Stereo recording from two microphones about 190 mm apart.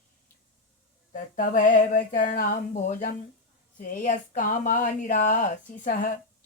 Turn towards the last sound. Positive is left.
turn(degrees=45)  # may be behind; listen again after turning